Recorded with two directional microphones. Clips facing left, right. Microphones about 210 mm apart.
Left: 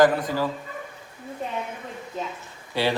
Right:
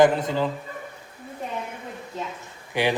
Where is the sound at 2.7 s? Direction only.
15° right (ahead or behind).